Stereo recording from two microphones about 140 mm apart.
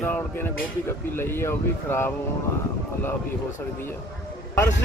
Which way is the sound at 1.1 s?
15° left (ahead or behind).